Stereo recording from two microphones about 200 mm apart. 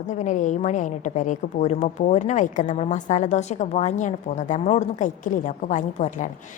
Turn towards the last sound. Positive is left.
turn(degrees=40)  # may be behind; listen again after turning